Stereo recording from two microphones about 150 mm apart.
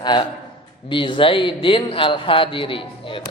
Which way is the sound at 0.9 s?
35° left (ahead or behind).